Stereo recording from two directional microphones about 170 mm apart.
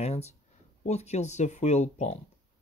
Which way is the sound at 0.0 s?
40° left (ahead or behind).